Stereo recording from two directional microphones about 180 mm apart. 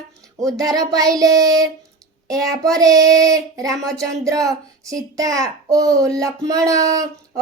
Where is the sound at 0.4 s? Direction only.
20° right (ahead or behind).